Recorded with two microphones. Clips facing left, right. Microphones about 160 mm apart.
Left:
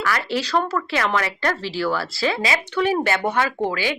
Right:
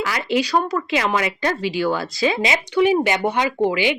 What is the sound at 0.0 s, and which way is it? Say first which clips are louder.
Speech: right 3 dB; 15° right (ahead or behind).